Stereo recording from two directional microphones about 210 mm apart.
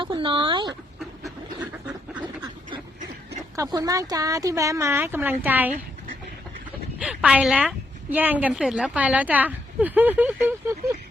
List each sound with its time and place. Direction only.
0.0 s a sound: 25° right (ahead or behind)
1.2 s duck: 5° right (ahead or behind)
2.2 s duck: 20° right (ahead or behind)
3.5 s speech: 15° right (ahead or behind)
7.0 s a woman's voice: 5° right (ahead or behind)